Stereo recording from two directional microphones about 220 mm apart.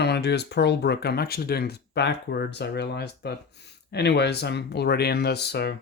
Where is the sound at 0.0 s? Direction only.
50° left (ahead or behind).